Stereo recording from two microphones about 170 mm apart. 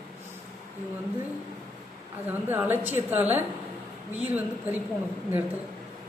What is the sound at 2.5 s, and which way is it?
Speech, 10° right (ahead or behind).